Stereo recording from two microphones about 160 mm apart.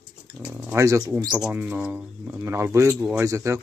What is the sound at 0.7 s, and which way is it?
Speech, 15° right (ahead or behind).